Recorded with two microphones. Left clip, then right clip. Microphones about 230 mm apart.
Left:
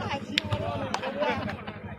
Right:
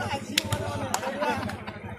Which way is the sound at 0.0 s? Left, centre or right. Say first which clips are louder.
Right 1 dB; right.